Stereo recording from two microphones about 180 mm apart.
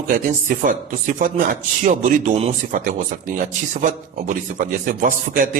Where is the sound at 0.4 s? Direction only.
50° right (ahead or behind).